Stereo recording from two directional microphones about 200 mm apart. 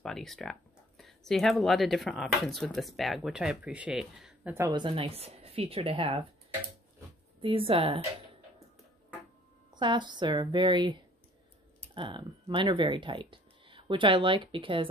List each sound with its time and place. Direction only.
0.0 s speech: centre (ahead or behind)
4.6 s speech: 20° right (ahead or behind)
7.4 s speech: 25° right (ahead or behind)
9.8 s speech: 25° right (ahead or behind)